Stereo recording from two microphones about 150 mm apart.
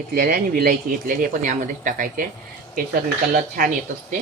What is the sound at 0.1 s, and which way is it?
Speech, 75° right (ahead or behind).